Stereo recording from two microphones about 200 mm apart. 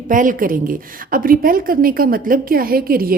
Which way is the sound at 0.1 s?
40° right (ahead or behind).